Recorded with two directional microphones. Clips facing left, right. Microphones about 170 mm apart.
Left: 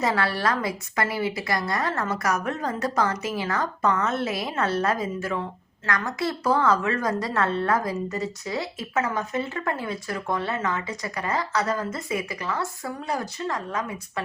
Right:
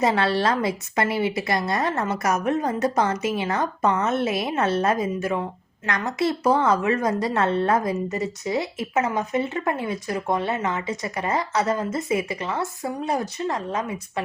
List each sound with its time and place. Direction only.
0.0 s a woman's voice: 25° right (ahead or behind)